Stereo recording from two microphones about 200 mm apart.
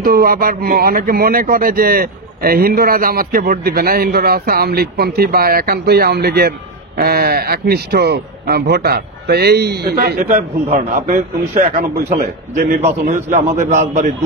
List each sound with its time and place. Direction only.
0.0 s a man's voice: 50° right (ahead or behind)